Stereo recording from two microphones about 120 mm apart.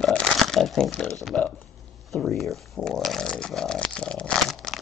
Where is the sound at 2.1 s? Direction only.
Centre (ahead or behind).